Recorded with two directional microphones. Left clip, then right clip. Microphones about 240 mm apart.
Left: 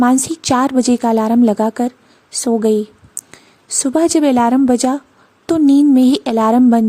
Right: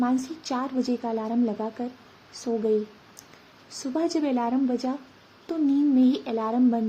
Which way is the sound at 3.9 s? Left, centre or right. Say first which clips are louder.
Left 13 dB; left.